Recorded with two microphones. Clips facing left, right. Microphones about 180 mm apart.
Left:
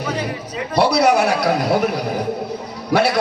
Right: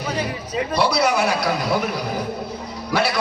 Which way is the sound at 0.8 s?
60° left (ahead or behind).